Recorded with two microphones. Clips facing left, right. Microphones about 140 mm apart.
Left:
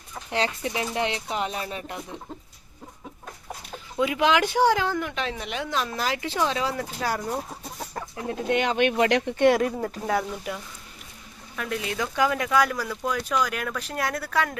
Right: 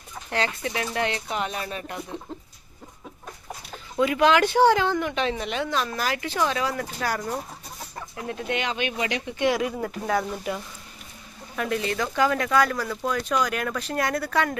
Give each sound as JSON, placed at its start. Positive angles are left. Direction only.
{"t": 0.3, "sound": "speech", "side_deg": 30}
{"t": 3.9, "sound": "speech", "side_deg": 10}
{"t": 8.1, "sound": "speech", "side_deg": 35}
{"t": 8.5, "sound": "speech", "side_deg": 50}
{"t": 9.8, "sound": "speech", "side_deg": 20}
{"t": 11.5, "sound": "speech", "side_deg": 0}